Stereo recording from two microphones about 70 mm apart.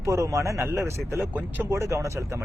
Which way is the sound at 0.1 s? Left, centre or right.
Right.